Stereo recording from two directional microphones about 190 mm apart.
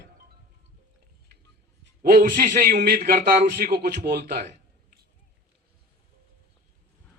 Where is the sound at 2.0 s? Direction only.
45° right (ahead or behind).